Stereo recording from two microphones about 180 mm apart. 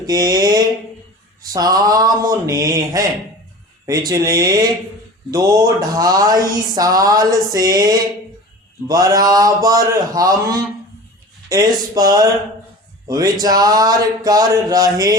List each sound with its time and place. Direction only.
0.0 s mantra: 20° right (ahead or behind)
1.4 s speech: 20° right (ahead or behind)